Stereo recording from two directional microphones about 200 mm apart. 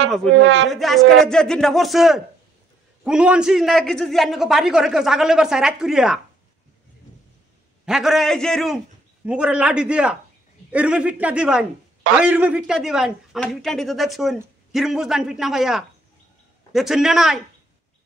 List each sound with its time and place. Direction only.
0.4 s speech: 65° right (ahead or behind)
0.7 s speech: centre (ahead or behind)
7.8 s speech: centre (ahead or behind)